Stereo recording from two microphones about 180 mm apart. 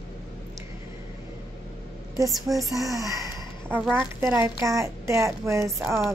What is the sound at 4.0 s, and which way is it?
Speech, 10° right (ahead or behind).